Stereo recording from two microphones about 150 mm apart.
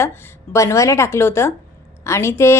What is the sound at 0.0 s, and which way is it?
A woman's voice, 15° left (ahead or behind).